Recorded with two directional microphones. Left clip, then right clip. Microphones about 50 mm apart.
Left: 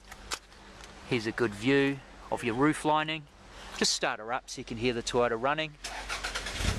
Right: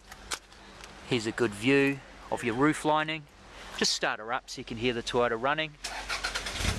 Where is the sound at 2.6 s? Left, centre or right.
Centre.